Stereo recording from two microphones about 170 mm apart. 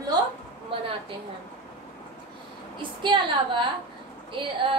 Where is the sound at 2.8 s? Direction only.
30° right (ahead or behind).